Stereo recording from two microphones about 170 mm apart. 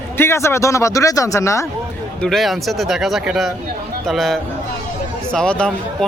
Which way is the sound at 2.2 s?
Centre (ahead or behind).